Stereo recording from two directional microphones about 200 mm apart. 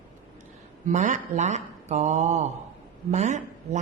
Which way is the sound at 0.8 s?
40° right (ahead or behind).